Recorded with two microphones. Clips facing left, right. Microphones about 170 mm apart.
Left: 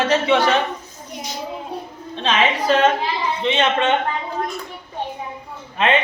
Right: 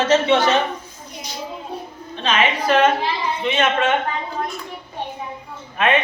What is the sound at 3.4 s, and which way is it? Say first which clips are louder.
Speech: even; 25° left (ahead or behind).